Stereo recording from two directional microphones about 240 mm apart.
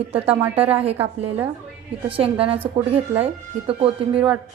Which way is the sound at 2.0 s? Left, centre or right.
Right.